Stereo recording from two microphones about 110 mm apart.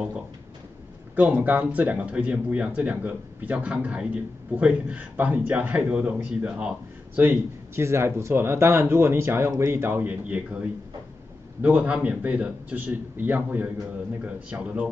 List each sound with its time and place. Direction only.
1.1 s speech: 15° right (ahead or behind)